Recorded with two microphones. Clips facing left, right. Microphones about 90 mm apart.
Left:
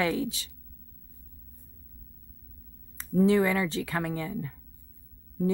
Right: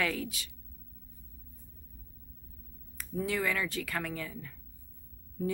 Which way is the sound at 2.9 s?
25° left (ahead or behind).